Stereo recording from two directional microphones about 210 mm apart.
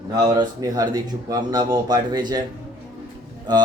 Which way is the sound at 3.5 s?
20° right (ahead or behind).